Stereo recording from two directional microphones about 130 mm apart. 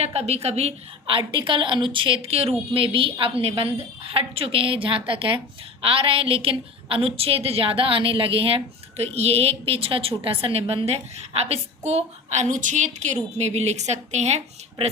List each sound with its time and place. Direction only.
0.0 s a woman's voice: 55° right (ahead or behind)
1.1 s a woman's voice: 40° right (ahead or behind); by 14.8 s 60° right (ahead or behind)